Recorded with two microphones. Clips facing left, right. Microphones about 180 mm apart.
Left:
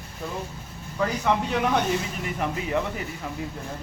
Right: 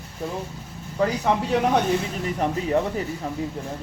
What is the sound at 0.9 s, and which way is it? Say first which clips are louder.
Speech: right 2 dB; 35° right (ahead or behind).